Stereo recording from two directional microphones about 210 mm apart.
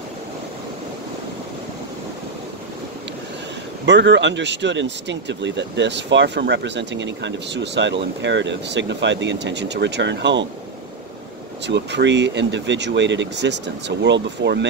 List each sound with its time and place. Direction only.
3.8 s speech: 55° right (ahead or behind)
11.6 s speech: 55° right (ahead or behind)